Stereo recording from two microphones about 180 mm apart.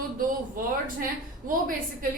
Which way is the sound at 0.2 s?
50° right (ahead or behind).